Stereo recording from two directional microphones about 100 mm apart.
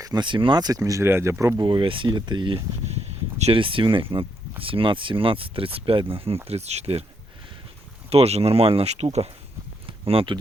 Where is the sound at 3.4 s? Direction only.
65° right (ahead or behind).